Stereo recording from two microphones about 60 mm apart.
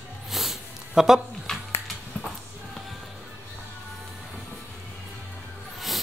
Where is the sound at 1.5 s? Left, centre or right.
Centre.